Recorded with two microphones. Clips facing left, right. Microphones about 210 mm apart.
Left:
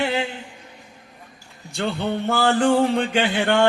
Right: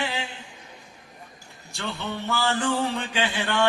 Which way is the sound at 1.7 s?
55° left (ahead or behind).